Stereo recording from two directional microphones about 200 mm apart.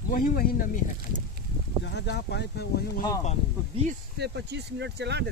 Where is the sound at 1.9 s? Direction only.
55° left (ahead or behind).